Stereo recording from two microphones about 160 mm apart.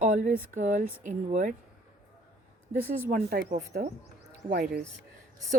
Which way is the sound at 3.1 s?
70° right (ahead or behind).